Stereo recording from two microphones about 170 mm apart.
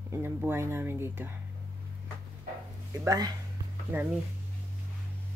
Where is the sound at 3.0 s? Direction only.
20° right (ahead or behind).